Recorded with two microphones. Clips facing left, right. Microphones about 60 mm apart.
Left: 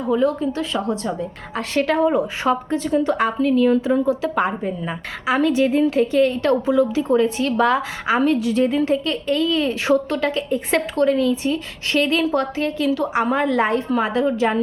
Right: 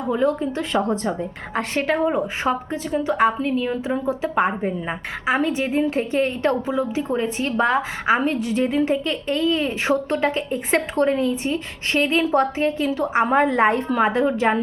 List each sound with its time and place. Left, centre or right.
0.1 s a woman's voice: right; by 3.8 s centre
4.1 s a woman's voice: right